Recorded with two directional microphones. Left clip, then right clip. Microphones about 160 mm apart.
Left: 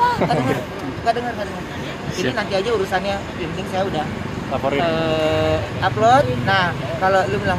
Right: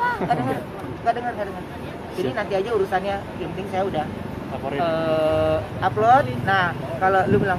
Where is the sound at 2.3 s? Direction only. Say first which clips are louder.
Left 2 dB; centre (ahead or behind).